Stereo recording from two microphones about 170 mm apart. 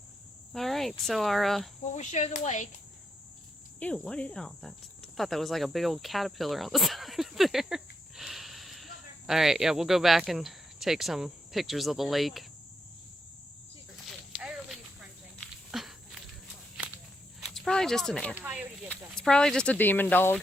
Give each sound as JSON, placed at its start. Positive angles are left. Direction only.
{"t": 0.5, "sound": "speech", "side_deg": 0}
{"t": 1.8, "sound": "speech", "side_deg": 45}
{"t": 3.8, "sound": "speech", "side_deg": 5}
{"t": 14.1, "sound": "snake", "side_deg": 0}
{"t": 15.4, "sound": "a sound", "side_deg": 0}
{"t": 17.4, "sound": "speech", "side_deg": 5}
{"t": 18.3, "sound": "speech", "side_deg": -10}
{"t": 18.9, "sound": "speech", "side_deg": 5}